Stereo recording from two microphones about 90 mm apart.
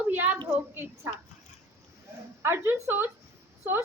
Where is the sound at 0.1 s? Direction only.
20° right (ahead or behind).